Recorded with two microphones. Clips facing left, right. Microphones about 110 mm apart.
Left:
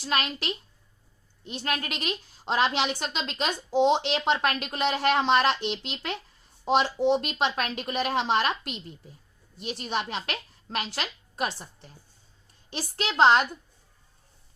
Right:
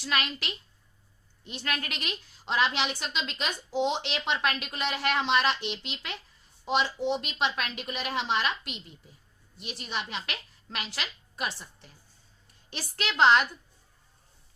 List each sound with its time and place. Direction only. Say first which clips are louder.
0.0 s a woman's voice: left 3 dB; 35° left (ahead or behind)
7.2 s a woman's voice: left 3 dB; 45° left (ahead or behind)
10.9 s a sound: left 4 dB; 40° left (ahead or behind)
12.7 s a woman's voice: left 4 dB; 30° left (ahead or behind)